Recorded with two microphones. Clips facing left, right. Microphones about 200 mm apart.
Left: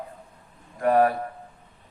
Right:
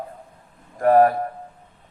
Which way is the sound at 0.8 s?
45° right (ahead or behind).